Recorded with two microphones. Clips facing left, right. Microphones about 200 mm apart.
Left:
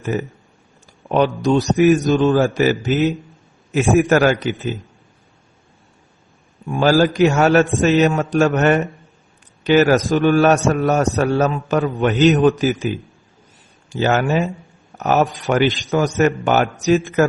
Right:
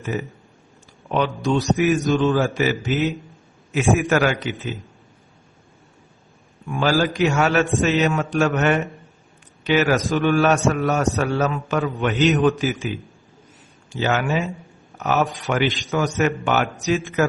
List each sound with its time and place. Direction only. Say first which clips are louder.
0.0 s a man's voice: left 4 dB; 45° left (ahead or behind)
6.7 s a man's voice: left 5 dB; 40° left (ahead or behind)
13.9 s a man's voice: left 4 dB; 45° left (ahead or behind)